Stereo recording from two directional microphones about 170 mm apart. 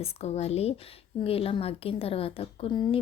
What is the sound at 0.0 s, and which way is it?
A woman's voice, 40° left (ahead or behind).